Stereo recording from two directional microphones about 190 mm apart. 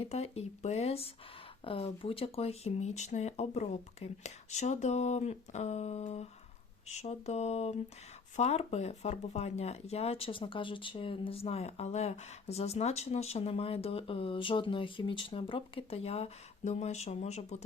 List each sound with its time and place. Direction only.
0.0 s speech: 35° left (ahead or behind)